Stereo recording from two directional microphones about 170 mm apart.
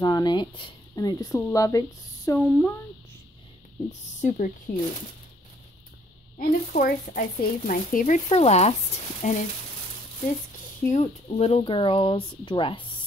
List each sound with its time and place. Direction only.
0.0 s speech: 25° left (ahead or behind)
4.2 s speech: 50° left (ahead or behind)
6.3 s speech: 55° left (ahead or behind)
8.3 s speech: 40° left (ahead or behind)
10.9 s speech: 40° left (ahead or behind)